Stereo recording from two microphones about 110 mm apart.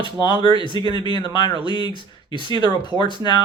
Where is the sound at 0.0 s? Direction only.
45° left (ahead or behind).